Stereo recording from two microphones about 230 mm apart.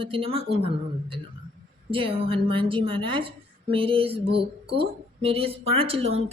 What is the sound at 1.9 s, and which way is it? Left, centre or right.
A woman's voice, right.